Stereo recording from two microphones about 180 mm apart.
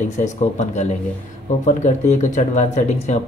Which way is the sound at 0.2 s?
40° left (ahead or behind).